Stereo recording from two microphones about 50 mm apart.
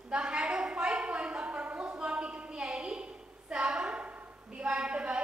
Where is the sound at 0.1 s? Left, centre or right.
Centre.